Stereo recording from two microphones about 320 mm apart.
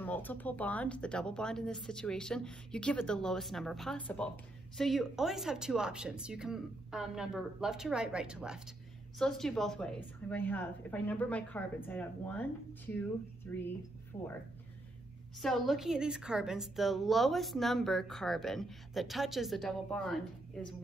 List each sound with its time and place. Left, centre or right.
0.0 s a woman's voice: centre
15.4 s a woman's voice: centre